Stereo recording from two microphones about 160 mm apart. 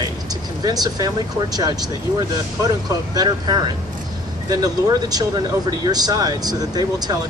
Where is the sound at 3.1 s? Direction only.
25° right (ahead or behind).